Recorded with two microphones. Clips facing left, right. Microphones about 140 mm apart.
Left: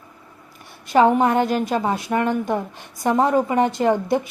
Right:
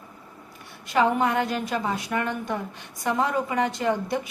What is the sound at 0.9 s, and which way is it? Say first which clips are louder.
A woman's voice: left 6 dB; 35° left (ahead or behind).